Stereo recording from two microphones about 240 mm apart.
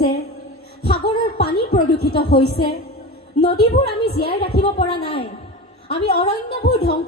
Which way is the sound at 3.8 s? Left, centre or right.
Left.